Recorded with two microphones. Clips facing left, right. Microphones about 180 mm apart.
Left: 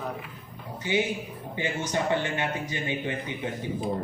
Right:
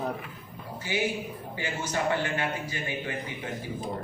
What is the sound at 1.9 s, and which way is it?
Speech, 25° left (ahead or behind).